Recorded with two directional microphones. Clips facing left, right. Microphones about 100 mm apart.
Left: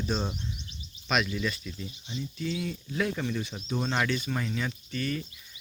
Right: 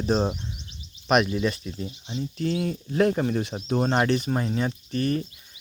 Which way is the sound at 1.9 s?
65° right (ahead or behind).